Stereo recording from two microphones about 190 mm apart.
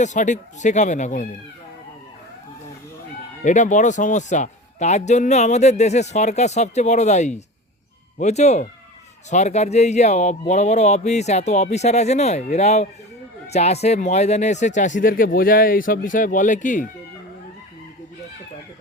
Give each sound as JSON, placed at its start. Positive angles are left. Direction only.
{"t": 0.0, "sound": "a man's voice", "side_deg": 40}
{"t": 3.4, "sound": "a man's voice", "side_deg": 40}